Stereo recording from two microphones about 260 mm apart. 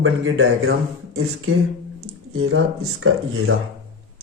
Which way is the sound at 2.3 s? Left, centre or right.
Right.